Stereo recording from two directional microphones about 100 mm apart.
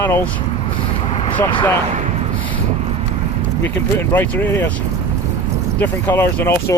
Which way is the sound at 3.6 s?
20° left (ahead or behind).